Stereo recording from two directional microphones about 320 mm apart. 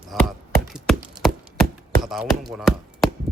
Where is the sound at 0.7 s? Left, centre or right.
Centre.